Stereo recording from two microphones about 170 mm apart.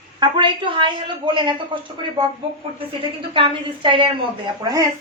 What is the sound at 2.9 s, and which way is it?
A woman's voice, 30° right (ahead or behind).